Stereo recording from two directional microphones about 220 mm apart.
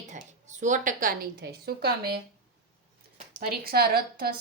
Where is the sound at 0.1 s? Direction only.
35° right (ahead or behind).